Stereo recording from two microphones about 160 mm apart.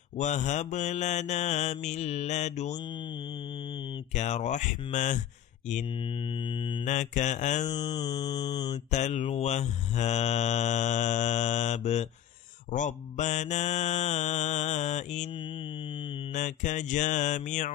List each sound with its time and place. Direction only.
0.2 s mantra: 50° left (ahead or behind)
4.1 s mantra: 45° left (ahead or behind)
6.5 s mantra: 35° left (ahead or behind)
6.8 s mantra: 50° left (ahead or behind)
7.7 s mantra: 25° left (ahead or behind)
8.9 s mantra: 45° left (ahead or behind)
16.3 s mantra: 50° left (ahead or behind)